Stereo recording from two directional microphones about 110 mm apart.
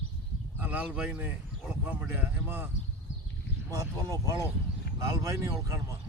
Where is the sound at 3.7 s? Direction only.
30° right (ahead or behind).